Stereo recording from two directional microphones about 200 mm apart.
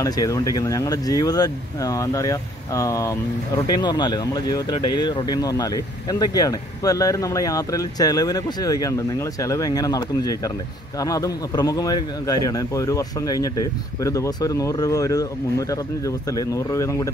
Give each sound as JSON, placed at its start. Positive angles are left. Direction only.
{"t": 0.0, "sound": "speech", "side_deg": 20}